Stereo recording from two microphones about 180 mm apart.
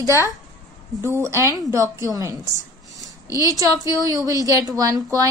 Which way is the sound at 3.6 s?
20° right (ahead or behind).